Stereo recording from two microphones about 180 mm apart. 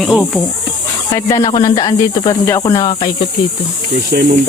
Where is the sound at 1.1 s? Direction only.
20° left (ahead or behind).